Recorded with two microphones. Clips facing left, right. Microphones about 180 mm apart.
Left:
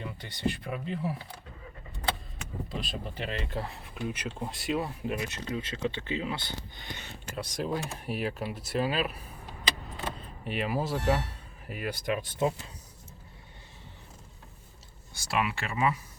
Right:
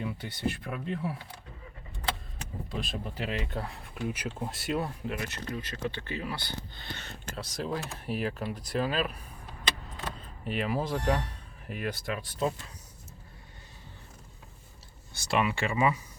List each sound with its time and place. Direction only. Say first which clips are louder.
0.0 s speech: even; 5° right (ahead or behind)
2.6 s speech: right 3 dB; centre (ahead or behind)
5.0 s speech: left 2 dB; 20° left (ahead or behind)
15.1 s speech: right 2 dB; 5° left (ahead or behind)